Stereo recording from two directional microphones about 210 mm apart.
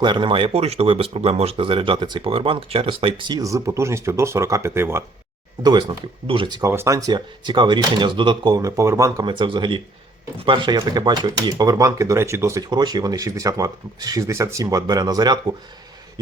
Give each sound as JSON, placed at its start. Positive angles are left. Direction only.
{"t": 0.0, "sound": "speech", "side_deg": -20}